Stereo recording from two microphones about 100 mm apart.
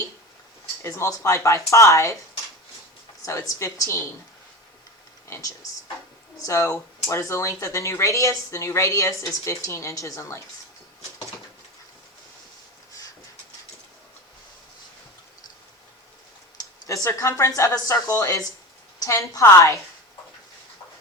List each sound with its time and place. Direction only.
0.8 s speech: 30° left (ahead or behind)
3.2 s speech: 35° left (ahead or behind)
5.3 s speech: 25° left (ahead or behind)
16.8 s speech: 30° left (ahead or behind)